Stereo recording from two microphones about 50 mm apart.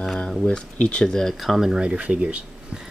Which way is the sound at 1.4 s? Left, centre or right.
Centre.